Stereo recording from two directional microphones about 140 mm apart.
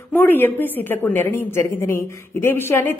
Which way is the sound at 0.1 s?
15° left (ahead or behind).